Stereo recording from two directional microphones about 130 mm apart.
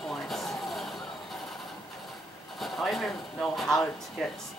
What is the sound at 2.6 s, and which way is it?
Speech, centre (ahead or behind).